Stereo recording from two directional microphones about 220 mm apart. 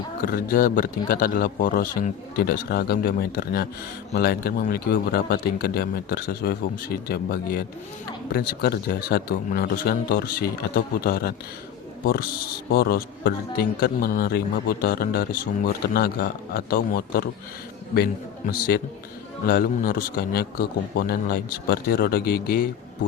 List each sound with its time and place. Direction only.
0.3 s a man's voice: 40° left (ahead or behind)
12.7 s a man's voice: 45° left (ahead or behind)